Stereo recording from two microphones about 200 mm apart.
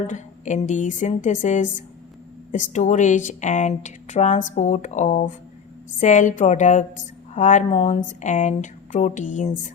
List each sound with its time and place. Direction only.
0.1 s a woman's voice: 35° left (ahead or behind)